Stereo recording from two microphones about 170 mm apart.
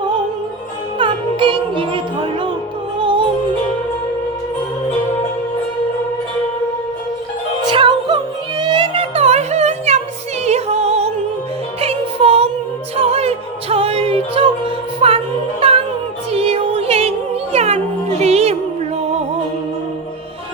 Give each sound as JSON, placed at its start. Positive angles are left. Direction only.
{"t": 0.9, "sound": "music", "side_deg": -30}
{"t": 3.0, "sound": "music", "side_deg": -30}
{"t": 7.7, "sound": "music", "side_deg": -30}
{"t": 16.3, "sound": "music", "side_deg": -35}